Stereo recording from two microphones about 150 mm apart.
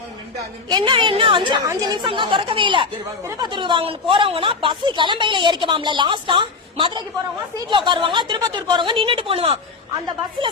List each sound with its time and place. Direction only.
0.7 s a woman's voice: 30° right (ahead or behind)